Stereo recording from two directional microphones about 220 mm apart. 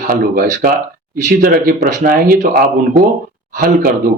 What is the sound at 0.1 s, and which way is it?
Speech, 40° right (ahead or behind).